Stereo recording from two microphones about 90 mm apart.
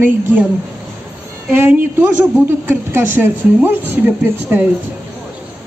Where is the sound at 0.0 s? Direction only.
20° right (ahead or behind).